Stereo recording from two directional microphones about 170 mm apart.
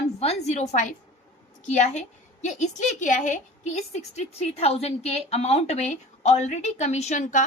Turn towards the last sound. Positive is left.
turn(degrees=45)  # may be behind; listen again after turning